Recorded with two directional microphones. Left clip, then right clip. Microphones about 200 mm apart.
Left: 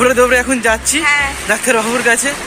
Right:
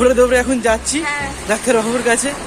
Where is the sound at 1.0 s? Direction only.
20° right (ahead or behind).